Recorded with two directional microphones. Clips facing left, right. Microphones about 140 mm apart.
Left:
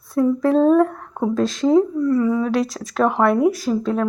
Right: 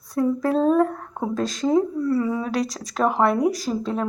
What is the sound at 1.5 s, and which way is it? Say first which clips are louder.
Speech: left 4 dB; 40° right (ahead or behind).